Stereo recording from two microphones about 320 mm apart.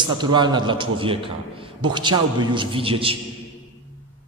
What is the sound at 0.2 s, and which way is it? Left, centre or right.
A man's voice, centre.